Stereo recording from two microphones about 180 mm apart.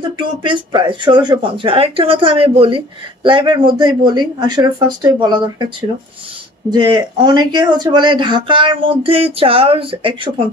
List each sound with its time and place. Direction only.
0.0 s speech: 25° right (ahead or behind)